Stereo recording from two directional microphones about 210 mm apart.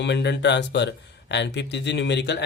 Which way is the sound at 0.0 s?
55° left (ahead or behind).